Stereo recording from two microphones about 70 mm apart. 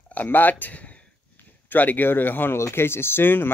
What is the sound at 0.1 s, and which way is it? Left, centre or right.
Speech, left.